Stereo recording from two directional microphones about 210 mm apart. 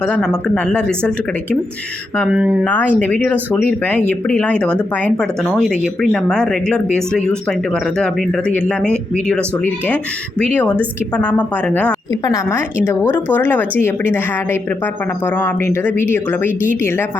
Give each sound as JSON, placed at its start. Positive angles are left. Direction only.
{"t": 0.0, "sound": "speech", "side_deg": 5}
{"t": 2.4, "sound": "speech", "side_deg": -5}
{"t": 2.6, "sound": "speech", "side_deg": 10}